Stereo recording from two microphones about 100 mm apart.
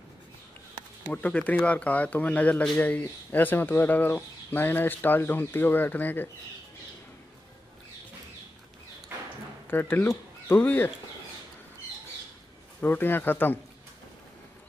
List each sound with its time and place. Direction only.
1.0 s speech: 15° left (ahead or behind)
9.7 s speech: 20° left (ahead or behind)
12.8 s speech: 20° left (ahead or behind)